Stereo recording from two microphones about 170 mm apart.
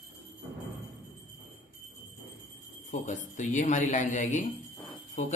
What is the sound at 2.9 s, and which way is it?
Speech, 45° left (ahead or behind).